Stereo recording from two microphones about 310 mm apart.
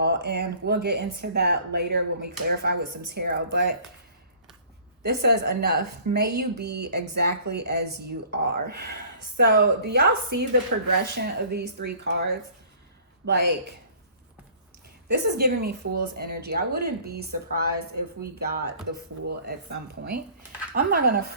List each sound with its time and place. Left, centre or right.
0.0 s speech: right
5.0 s speech: right
15.0 s speech: right